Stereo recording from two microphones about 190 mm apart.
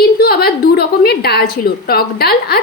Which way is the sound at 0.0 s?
55° left (ahead or behind).